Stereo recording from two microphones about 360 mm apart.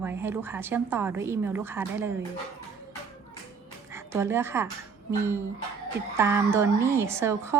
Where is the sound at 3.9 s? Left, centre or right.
Centre.